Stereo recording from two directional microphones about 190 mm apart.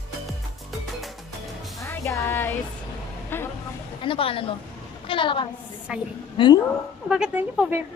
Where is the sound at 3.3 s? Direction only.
10° left (ahead or behind).